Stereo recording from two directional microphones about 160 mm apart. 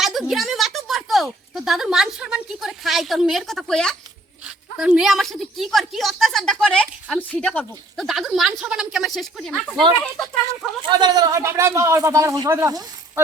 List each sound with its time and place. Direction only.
0.0 s a woman's voice: centre (ahead or behind)
10.8 s speech: 25° right (ahead or behind)